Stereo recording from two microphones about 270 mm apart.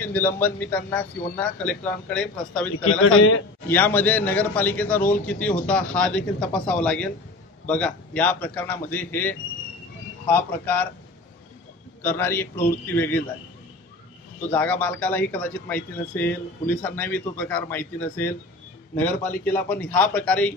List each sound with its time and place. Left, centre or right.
0.0 s a man's voice: centre
2.8 s a man's voice: left
3.6 s a man's voice: centre
12.0 s speech: centre
14.5 s a man's voice: centre